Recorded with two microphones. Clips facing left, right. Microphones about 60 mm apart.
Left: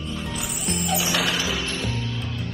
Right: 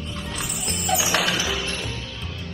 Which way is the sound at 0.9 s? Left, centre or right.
Right.